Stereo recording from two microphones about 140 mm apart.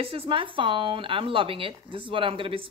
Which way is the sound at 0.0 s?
40° right (ahead or behind).